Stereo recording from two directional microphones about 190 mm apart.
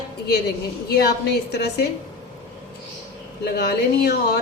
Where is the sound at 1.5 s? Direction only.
60° left (ahead or behind).